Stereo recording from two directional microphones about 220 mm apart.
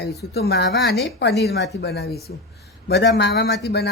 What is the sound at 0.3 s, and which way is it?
A woman's voice, 50° left (ahead or behind).